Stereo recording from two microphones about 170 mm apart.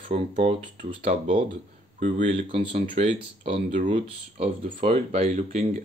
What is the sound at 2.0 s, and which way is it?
Speech, 50° right (ahead or behind).